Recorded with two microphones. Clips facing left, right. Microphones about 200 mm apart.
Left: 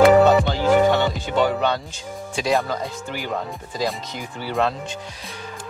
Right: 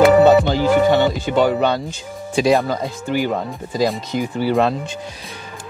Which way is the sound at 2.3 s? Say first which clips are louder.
Right 6 dB; 10° right (ahead or behind).